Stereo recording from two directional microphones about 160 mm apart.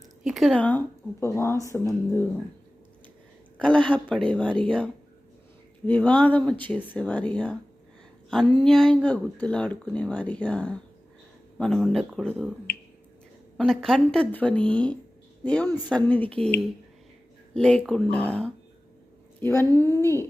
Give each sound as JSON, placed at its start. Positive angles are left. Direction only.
{"t": 0.3, "sound": "speech", "side_deg": 0}
{"t": 3.6, "sound": "speech", "side_deg": 5}
{"t": 13.6, "sound": "speech", "side_deg": 0}
{"t": 17.5, "sound": "a woman's voice", "side_deg": 5}
{"t": 19.9, "sound": "music", "side_deg": -20}